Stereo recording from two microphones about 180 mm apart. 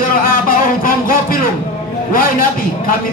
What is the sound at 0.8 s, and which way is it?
Music, 50° left (ahead or behind).